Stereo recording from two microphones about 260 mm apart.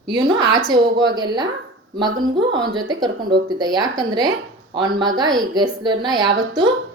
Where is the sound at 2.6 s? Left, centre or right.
Centre.